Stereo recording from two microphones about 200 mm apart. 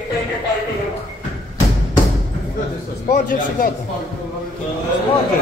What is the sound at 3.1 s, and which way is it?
Speech, 40° left (ahead or behind).